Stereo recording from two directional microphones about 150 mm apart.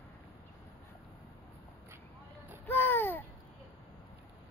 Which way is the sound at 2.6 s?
15° left (ahead or behind).